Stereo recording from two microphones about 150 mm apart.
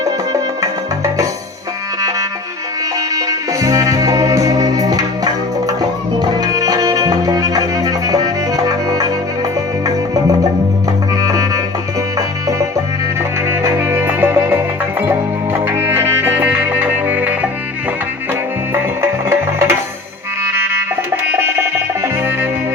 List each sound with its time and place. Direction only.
0.6 s music: 20° right (ahead or behind)
19.3 s music: 15° right (ahead or behind)
22.0 s music: 15° right (ahead or behind)